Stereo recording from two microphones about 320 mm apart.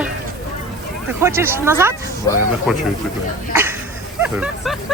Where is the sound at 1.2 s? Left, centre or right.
Centre.